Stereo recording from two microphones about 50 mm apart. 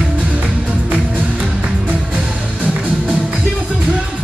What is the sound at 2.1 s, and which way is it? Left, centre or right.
Music, right.